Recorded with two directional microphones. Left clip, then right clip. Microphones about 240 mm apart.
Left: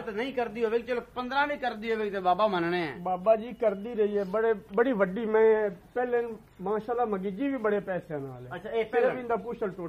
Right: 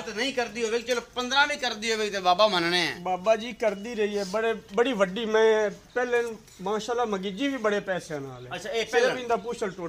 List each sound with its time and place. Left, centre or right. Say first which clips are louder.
0.1 s speech: right 3 dB; left
1.6 s speech: right 3 dB; centre
3.0 s a man's voice: right 1 dB; centre
8.7 s speech: right 2 dB; centre
9.3 s a man's voice: right 3 dB; centre